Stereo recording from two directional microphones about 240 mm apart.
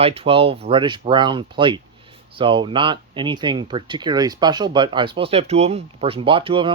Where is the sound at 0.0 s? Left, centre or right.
Right.